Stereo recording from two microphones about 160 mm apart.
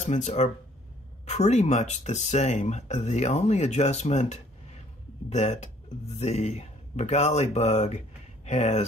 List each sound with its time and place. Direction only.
0.0 s speech: 45° left (ahead or behind)